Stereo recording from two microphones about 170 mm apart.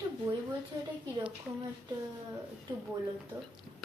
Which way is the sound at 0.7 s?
25° right (ahead or behind).